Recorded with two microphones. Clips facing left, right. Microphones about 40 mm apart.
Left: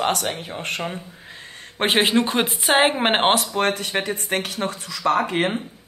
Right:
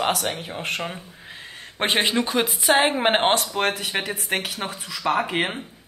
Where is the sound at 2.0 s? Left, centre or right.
Centre.